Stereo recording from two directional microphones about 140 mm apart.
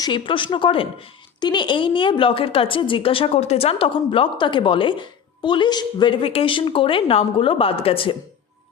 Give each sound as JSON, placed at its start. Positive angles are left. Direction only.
{"t": 0.0, "sound": "speech", "side_deg": 35}